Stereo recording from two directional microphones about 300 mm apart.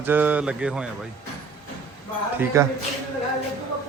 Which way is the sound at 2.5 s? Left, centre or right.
Centre.